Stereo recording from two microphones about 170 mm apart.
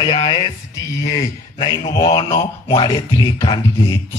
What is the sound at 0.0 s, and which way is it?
Music, 30° left (ahead or behind).